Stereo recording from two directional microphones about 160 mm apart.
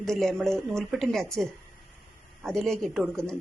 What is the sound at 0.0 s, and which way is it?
Speech, 5° left (ahead or behind).